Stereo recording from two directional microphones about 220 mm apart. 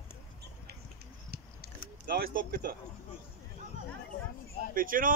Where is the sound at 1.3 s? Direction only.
45° right (ahead or behind).